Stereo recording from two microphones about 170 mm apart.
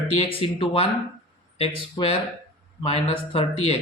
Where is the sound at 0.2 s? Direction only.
35° left (ahead or behind).